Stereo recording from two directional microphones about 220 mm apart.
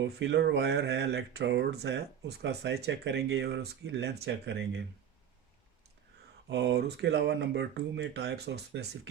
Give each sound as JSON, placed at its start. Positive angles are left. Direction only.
{"t": 0.0, "sound": "speech", "side_deg": -50}
{"t": 6.5, "sound": "speech", "side_deg": -50}